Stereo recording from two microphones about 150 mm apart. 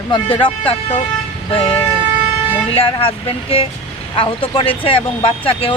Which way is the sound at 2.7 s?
40° left (ahead or behind).